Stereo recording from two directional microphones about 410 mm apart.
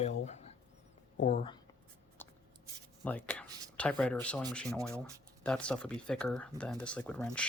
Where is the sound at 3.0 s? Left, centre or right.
Centre.